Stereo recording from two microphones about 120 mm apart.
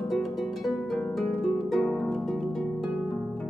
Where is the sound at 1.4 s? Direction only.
5° left (ahead or behind).